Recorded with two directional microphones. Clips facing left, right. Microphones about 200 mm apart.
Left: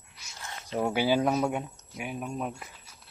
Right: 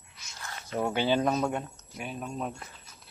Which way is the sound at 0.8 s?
10° left (ahead or behind).